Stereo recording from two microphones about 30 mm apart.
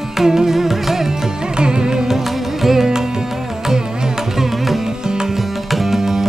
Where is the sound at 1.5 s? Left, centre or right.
Right.